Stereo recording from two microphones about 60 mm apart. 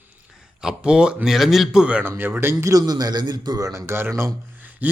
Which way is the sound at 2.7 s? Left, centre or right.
Right.